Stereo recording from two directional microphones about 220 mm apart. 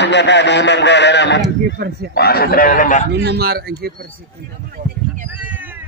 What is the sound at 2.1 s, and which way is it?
Speech, 45° left (ahead or behind).